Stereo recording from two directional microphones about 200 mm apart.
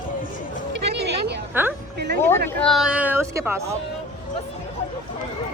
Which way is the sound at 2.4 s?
5° left (ahead or behind).